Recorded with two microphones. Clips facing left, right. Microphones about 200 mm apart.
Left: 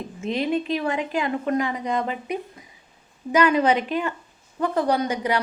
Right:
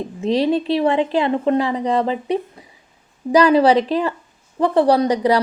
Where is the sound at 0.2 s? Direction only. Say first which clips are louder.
Right 6 dB; 35° right (ahead or behind).